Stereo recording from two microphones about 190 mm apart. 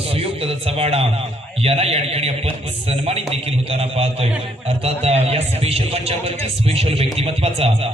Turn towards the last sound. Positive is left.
turn(degrees=-30)  # may be behind; listen again after turning